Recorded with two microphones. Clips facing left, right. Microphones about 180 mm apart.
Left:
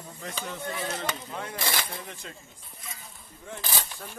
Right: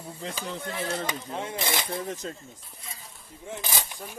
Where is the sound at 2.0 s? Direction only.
40° right (ahead or behind).